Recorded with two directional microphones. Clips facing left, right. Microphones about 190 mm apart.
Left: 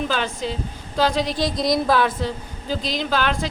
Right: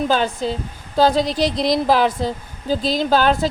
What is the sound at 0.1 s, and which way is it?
Speech, 35° right (ahead or behind).